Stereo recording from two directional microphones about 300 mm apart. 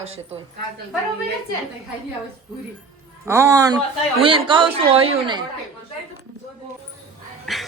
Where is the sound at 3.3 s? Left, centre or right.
Centre.